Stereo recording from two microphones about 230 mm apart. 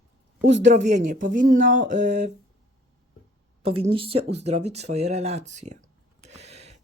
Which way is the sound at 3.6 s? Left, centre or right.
Right.